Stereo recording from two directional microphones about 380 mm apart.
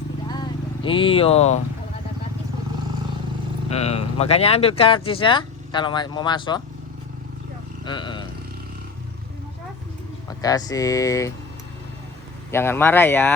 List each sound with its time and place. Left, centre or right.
0.9 s speech: centre
3.7 s speech: centre
7.9 s speech: centre
10.2 s speech: centre
12.5 s speech: centre